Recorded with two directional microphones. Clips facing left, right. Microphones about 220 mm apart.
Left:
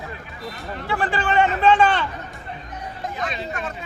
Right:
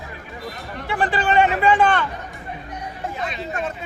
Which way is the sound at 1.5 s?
10° right (ahead or behind).